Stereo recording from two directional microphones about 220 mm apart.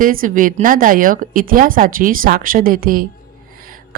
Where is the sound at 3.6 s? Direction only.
40° right (ahead or behind).